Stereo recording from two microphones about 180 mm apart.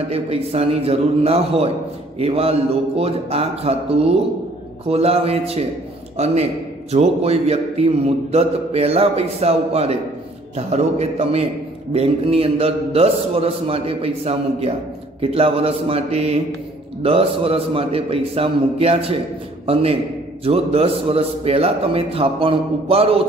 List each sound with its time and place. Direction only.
0.1 s a man's voice: 35° right (ahead or behind)